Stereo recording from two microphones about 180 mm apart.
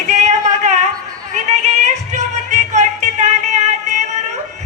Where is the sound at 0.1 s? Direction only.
40° right (ahead or behind).